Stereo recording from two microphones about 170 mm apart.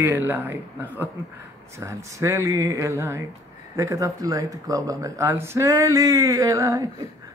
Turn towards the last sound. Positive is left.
turn(degrees=-20)  # may be behind; listen again after turning